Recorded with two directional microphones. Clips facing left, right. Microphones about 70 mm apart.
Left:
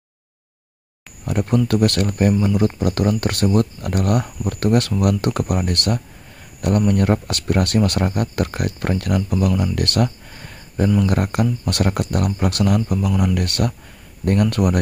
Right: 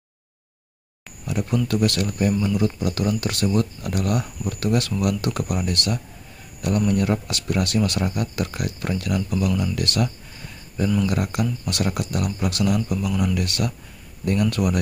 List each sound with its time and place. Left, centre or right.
1.2 s speech: left
2.3 s speech: left
13.4 s speech: left